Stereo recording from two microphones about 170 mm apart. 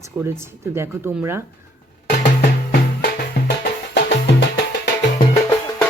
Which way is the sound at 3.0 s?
75° left (ahead or behind).